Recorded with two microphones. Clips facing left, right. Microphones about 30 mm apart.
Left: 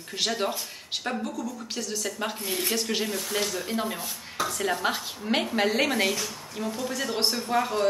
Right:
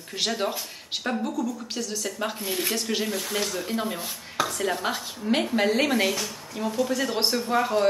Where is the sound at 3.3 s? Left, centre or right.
Centre.